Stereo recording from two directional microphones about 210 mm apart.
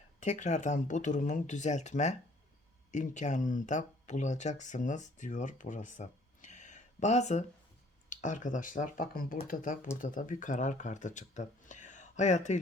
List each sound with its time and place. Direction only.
0.2 s speech: 35° left (ahead or behind)